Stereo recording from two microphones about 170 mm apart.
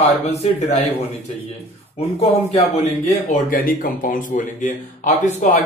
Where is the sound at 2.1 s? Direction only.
40° left (ahead or behind).